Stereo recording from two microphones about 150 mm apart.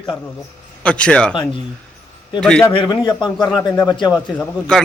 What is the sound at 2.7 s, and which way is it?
Speech, 35° left (ahead or behind).